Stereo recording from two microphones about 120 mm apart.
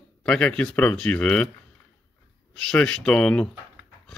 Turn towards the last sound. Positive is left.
turn(degrees=10)  # may be behind; listen again after turning